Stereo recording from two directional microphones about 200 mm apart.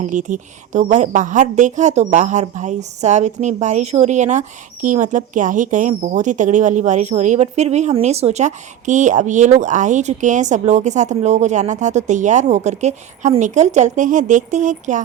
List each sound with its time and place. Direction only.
0.0 s a woman's voice: 40° right (ahead or behind)